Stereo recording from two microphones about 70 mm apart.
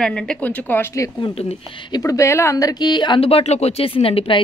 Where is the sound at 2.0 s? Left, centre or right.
Left.